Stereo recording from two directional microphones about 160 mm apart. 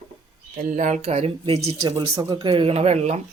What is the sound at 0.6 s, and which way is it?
Speech, 55° right (ahead or behind).